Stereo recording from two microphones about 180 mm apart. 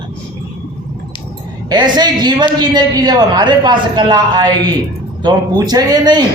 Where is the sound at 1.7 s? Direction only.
25° right (ahead or behind).